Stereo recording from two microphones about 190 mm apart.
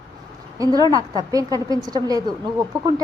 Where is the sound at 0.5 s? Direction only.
20° right (ahead or behind).